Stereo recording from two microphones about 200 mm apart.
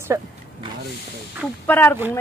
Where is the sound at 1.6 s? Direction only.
10° left (ahead or behind).